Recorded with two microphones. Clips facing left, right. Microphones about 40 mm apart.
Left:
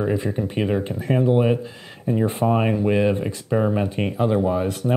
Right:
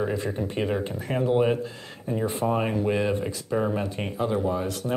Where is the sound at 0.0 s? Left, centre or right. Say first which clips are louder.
Left 4 dB; centre.